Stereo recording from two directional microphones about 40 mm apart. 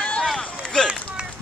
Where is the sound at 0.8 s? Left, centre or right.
Centre.